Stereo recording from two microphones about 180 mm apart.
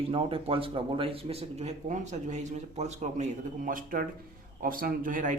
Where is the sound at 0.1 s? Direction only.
30° right (ahead or behind).